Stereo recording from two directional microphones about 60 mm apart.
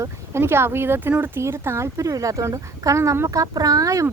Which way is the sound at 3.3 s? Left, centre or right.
Right.